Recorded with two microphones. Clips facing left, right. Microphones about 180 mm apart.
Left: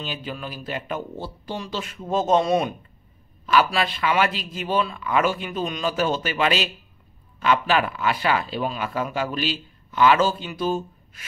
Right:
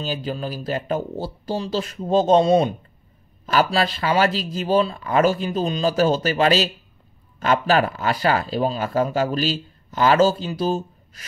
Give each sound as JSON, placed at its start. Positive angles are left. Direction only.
{"t": 0.0, "sound": "speech", "side_deg": -35}